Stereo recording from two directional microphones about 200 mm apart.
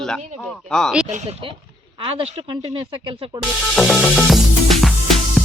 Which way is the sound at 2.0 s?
30° right (ahead or behind).